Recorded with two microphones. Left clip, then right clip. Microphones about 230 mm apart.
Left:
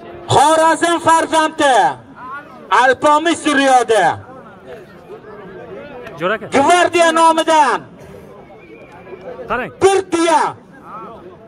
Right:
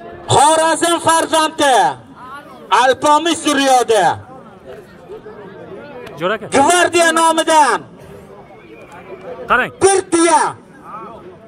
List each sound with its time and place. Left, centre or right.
0.3 s a man's voice: right
6.1 s a man's voice: centre
6.5 s a man's voice: right
9.5 s a man's voice: centre